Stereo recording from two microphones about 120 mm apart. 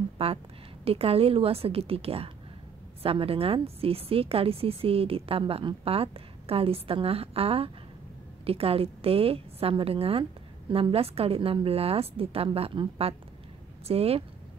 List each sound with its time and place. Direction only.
0.2 s a woman's voice: 55° right (ahead or behind)